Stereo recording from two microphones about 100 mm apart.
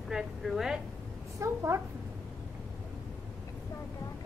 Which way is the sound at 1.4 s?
30° right (ahead or behind).